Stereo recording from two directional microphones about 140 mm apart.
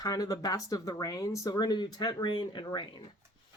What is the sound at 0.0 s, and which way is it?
Speech, 25° left (ahead or behind).